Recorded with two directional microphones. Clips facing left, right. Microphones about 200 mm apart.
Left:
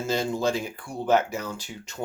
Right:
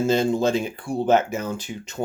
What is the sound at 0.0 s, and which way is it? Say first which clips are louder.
Speech: right 6 dB; 25° right (ahead or behind).